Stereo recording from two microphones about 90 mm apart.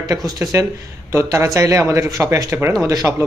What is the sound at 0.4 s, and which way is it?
Speech, 30° right (ahead or behind).